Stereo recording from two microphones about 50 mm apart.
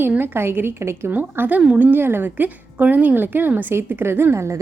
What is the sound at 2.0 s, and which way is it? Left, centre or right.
Speech, right.